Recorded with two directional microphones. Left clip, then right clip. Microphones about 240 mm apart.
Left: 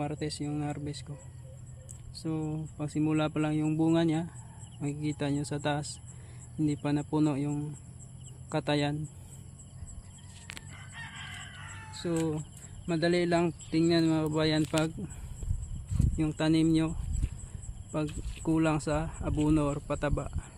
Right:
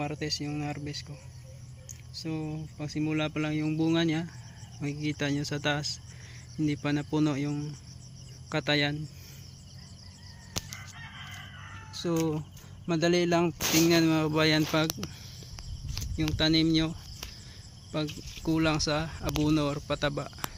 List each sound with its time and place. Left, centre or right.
0.0 s speech: centre
10.7 s chicken: left
11.9 s speech: centre
16.1 s speech: centre